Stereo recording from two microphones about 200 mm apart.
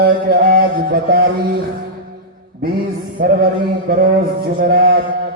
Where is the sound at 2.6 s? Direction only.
50° right (ahead or behind).